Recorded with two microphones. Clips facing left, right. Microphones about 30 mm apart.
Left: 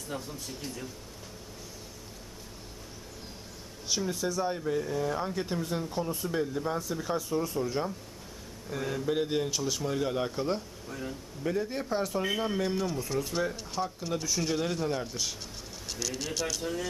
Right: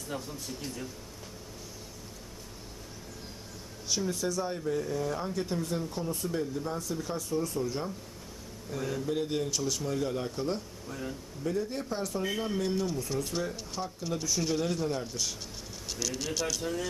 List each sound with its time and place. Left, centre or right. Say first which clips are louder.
0.1 s speech: even; centre
3.8 s speech: even; centre
10.3 s speech: left 2 dB; centre
11.4 s speech: left 1 dB; left; by 16.8 s centre